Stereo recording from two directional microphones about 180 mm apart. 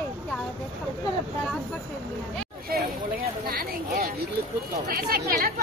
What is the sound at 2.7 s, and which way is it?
Speech, 55° right (ahead or behind).